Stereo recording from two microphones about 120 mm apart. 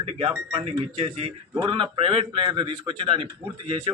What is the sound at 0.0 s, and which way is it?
Speech, 50° right (ahead or behind).